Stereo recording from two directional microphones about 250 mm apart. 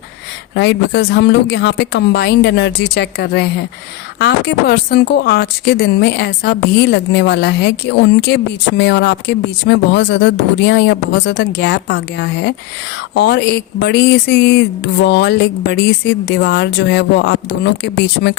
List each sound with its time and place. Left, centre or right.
0.5 s speech: left